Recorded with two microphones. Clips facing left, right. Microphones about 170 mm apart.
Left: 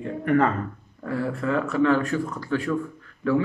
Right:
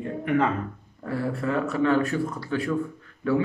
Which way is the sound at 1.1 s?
35° right (ahead or behind).